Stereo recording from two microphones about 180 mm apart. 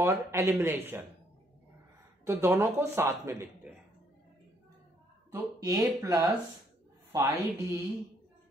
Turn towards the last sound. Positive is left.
turn(degrees=-20)  # may be behind; listen again after turning